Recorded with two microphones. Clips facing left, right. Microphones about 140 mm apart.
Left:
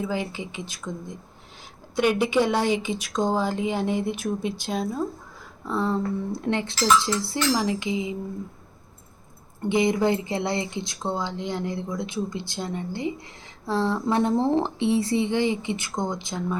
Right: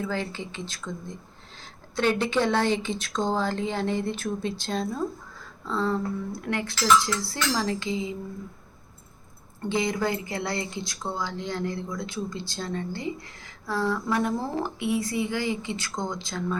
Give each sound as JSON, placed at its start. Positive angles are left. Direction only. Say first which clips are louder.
{"t": 0.0, "sound": "speech", "louder": "left 2 dB", "side_deg": 15}
{"t": 9.6, "sound": "speech", "louder": "left 5 dB", "side_deg": 20}